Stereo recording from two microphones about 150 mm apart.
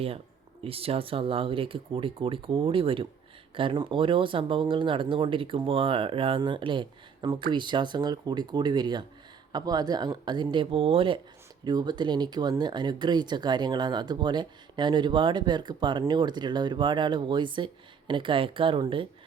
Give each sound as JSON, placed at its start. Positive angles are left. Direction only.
{"t": 0.6, "sound": "speech", "side_deg": -40}